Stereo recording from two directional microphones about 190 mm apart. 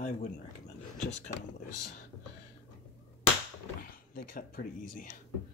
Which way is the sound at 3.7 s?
50° left (ahead or behind).